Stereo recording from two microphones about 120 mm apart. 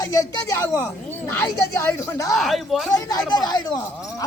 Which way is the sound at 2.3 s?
Centre (ahead or behind).